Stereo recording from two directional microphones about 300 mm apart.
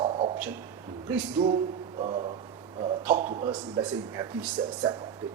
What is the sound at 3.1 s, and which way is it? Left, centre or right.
A man's voice, right.